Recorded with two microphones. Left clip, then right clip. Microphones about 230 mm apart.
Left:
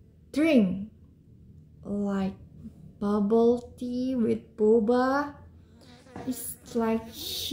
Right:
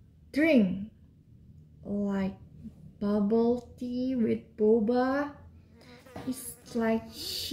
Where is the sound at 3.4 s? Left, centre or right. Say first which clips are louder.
Left 5 dB; centre.